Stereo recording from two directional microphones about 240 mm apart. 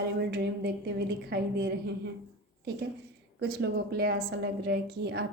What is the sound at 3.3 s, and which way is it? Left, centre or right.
A woman's voice, right.